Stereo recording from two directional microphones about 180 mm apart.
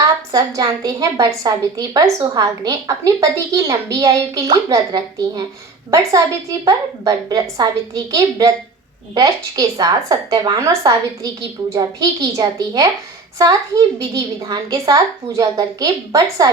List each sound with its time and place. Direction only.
0.3 s a woman's voice: 20° right (ahead or behind)